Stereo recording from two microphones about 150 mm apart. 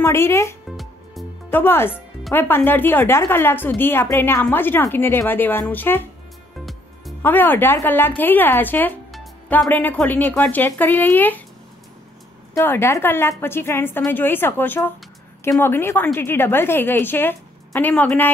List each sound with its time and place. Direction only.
0.0 s a woman's voice: 15° left (ahead or behind)
0.7 s music: centre (ahead or behind)
1.5 s a woman's voice: 15° left (ahead or behind)
7.2 s a woman's voice: 15° left (ahead or behind)
12.5 s a woman's voice: 15° left (ahead or behind)